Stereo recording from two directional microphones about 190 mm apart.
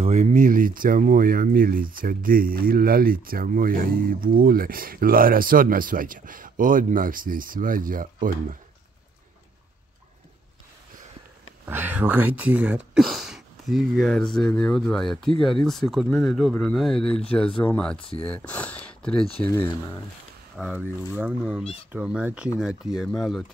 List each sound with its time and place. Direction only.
0.0 s speech: 35° right (ahead or behind)
11.6 s speech: 10° right (ahead or behind); by 18.0 s 5° left (ahead or behind)
18.1 s speech: 30° left (ahead or behind)
18.4 s speech: 10° left (ahead or behind)
20.5 s speech: 5° right (ahead or behind)